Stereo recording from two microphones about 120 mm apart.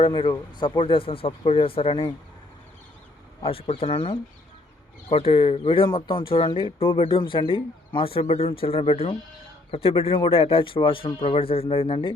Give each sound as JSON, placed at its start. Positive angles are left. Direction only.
{"t": 0.0, "sound": "speech", "side_deg": 45}
{"t": 3.4, "sound": "speech", "side_deg": 55}
{"t": 5.1, "sound": "speech", "side_deg": 55}